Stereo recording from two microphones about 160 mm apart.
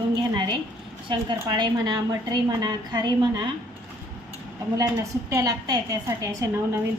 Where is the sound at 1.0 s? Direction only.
30° right (ahead or behind).